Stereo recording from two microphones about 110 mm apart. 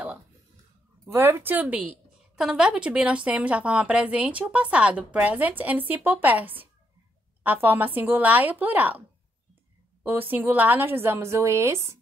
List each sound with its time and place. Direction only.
1.0 s a woman's voice: 20° right (ahead or behind)
10.0 s a woman's voice: 20° right (ahead or behind)